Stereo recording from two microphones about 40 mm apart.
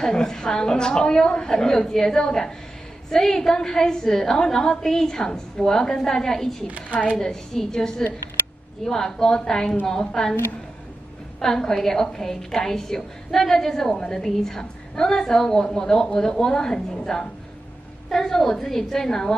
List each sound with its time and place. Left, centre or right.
0.0 s a woman's voice: centre
11.3 s a woman's voice: centre